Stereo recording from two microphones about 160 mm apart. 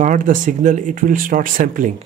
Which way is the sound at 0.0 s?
55° right (ahead or behind).